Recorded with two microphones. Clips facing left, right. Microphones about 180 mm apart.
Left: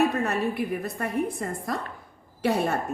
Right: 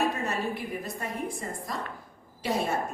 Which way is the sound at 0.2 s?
60° left (ahead or behind).